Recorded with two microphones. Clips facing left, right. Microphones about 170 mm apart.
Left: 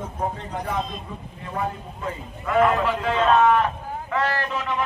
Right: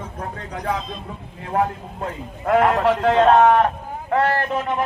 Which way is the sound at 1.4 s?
75° right (ahead or behind).